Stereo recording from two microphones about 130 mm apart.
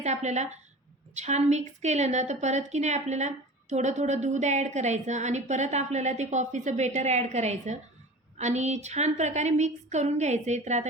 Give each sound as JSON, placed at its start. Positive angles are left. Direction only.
{"t": 0.0, "sound": "a woman's voice", "side_deg": -60}